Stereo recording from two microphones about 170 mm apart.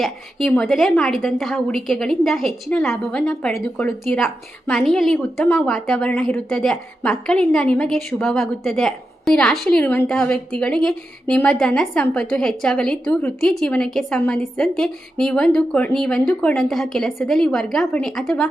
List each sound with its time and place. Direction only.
0.0 s a woman's voice: centre (ahead or behind)